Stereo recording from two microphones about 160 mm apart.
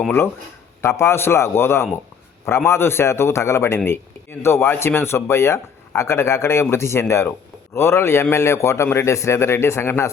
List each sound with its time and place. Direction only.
0.8 s speech: 15° left (ahead or behind)